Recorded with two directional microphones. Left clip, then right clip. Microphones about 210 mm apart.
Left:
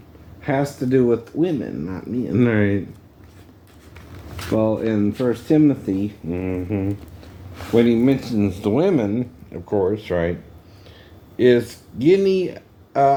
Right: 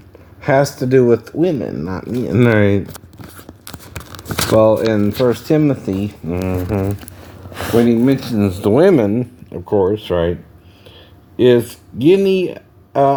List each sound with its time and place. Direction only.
0.4 s speech: 50° right (ahead or behind)
8.0 s speech: 40° right (ahead or behind)
11.3 s speech: 40° right (ahead or behind)